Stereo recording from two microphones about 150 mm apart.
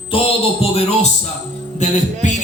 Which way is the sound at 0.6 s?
40° left (ahead or behind).